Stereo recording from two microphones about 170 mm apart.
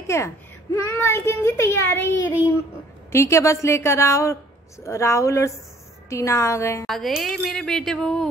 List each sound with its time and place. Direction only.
0.0 s a child's voice: 15° left (ahead or behind)
6.9 s speech: centre (ahead or behind)